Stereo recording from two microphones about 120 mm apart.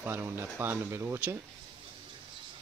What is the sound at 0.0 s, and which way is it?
Speech, 20° right (ahead or behind).